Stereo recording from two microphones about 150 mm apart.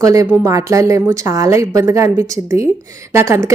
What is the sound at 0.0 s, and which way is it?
A woman's voice, 25° right (ahead or behind).